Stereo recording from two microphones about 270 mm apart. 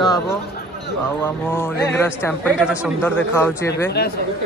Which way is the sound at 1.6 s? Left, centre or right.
Centre.